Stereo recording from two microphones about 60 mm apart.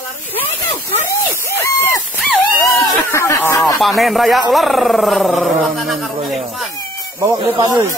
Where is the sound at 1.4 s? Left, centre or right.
Left.